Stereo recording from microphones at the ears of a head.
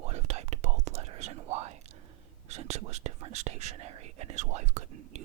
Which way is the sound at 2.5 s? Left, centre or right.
Right.